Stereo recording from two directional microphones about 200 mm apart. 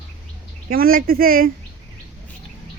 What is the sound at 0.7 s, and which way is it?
Speech, 45° right (ahead or behind).